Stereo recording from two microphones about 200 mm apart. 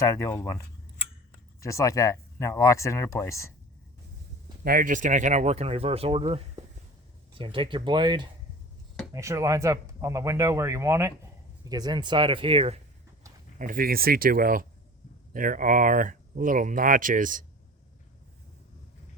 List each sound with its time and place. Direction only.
0.0 s speech: 15° left (ahead or behind)
1.6 s speech: 15° left (ahead or behind)
4.6 s speech: 45° right (ahead or behind); by 12.8 s 30° right (ahead or behind)
13.6 s speech: 45° right (ahead or behind)